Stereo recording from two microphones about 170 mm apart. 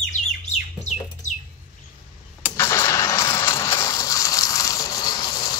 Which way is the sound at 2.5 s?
15° left (ahead or behind).